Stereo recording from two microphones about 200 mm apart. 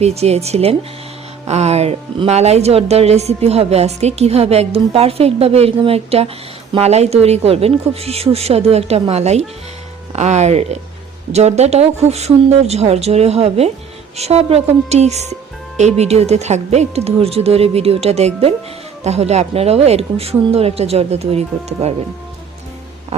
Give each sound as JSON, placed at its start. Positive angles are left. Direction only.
{"t": 0.0, "sound": "speech", "side_deg": -30}